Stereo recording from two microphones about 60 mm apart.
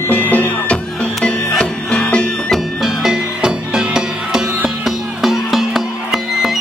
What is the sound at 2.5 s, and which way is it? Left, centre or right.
Music, centre.